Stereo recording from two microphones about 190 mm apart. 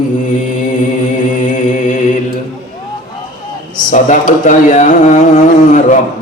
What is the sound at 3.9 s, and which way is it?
A man's voice, 40° left (ahead or behind).